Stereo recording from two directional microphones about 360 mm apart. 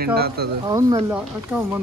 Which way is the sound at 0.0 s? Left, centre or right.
Right.